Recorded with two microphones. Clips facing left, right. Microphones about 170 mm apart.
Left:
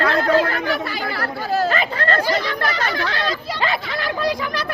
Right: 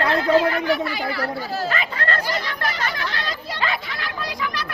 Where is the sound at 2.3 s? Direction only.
90° left.